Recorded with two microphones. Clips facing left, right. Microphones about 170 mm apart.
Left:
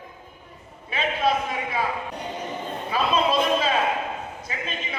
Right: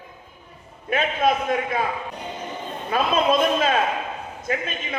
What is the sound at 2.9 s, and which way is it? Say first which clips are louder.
Speech: right 3 dB; 50° right (ahead or behind).